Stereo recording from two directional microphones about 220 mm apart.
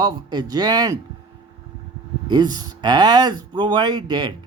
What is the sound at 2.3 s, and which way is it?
Speech, 20° right (ahead or behind).